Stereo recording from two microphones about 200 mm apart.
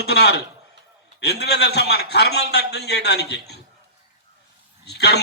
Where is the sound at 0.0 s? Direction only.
55° left (ahead or behind).